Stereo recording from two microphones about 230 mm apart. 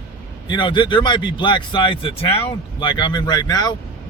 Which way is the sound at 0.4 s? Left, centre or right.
Centre.